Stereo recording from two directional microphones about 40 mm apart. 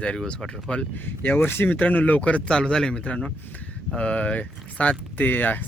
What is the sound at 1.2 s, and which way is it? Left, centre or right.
Speech, left.